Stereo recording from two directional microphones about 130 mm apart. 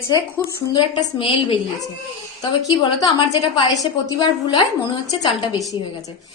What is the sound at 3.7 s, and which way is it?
A woman's voice, 30° left (ahead or behind).